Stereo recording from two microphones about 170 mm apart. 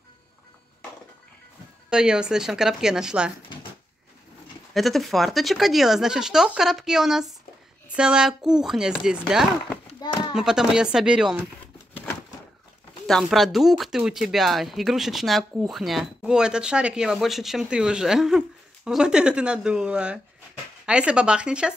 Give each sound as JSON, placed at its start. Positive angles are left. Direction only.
{"t": 1.9, "sound": "speech", "side_deg": -5}
{"t": 4.7, "sound": "speech", "side_deg": 0}
{"t": 9.9, "sound": "a sound", "side_deg": 25}
{"t": 10.3, "sound": "speech", "side_deg": -5}
{"t": 13.0, "sound": "speech", "side_deg": 0}